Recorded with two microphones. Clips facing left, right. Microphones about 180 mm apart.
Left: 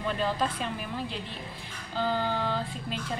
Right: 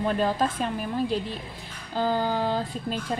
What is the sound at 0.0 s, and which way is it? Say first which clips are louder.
Speech: right 5 dB; 45° right (ahead or behind).